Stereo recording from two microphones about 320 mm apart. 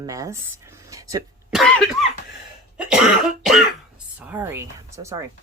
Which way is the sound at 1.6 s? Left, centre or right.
Centre.